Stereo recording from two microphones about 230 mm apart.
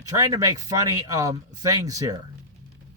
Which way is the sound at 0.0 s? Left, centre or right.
Centre.